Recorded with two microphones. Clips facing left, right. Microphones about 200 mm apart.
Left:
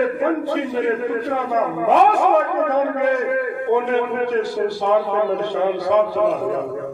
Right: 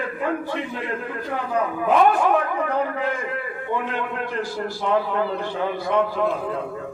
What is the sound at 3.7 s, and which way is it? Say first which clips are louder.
A man's voice: left 8 dB; 60° left (ahead or behind).